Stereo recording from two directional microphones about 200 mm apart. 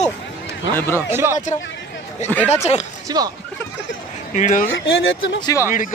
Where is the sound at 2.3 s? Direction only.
10° left (ahead or behind).